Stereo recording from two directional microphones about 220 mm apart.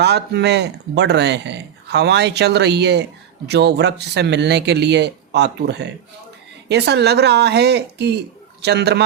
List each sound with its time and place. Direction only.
0.0 s speech: 50° right (ahead or behind)